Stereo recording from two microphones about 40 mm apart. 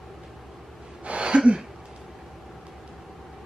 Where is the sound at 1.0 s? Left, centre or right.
Right.